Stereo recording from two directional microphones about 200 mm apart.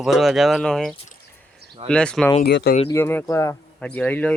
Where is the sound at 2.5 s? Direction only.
55° left (ahead or behind).